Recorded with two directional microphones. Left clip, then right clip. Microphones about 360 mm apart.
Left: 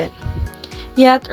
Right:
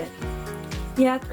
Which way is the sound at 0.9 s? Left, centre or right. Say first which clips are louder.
Left 12 dB; left.